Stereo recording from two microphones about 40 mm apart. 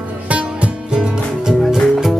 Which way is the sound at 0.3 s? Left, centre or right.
Right.